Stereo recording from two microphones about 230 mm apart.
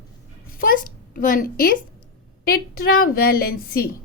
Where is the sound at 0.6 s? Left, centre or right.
Left.